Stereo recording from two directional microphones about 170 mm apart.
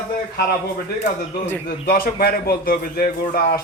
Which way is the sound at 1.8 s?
60° left (ahead or behind).